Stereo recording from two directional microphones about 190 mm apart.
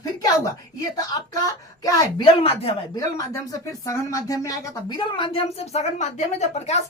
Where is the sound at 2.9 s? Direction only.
20° left (ahead or behind).